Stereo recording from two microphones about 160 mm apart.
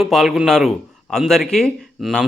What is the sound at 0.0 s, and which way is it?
Speech, centre (ahead or behind).